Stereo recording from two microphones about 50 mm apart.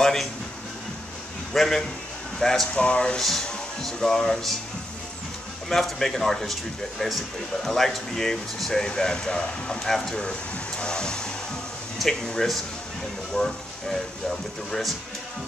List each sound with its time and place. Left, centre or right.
0.0 s speech: centre
1.5 s speech: centre
2.7 s speech: centre
3.2 s speech: centre
5.7 s speech: centre
10.2 s speech: centre
12.3 s speech: centre